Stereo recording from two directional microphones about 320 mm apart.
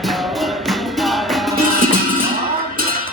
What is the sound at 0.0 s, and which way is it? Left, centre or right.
Music, centre.